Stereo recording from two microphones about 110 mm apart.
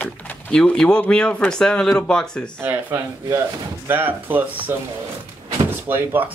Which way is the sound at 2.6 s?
20° right (ahead or behind).